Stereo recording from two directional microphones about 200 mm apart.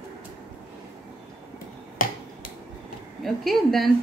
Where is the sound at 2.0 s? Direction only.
45° left (ahead or behind).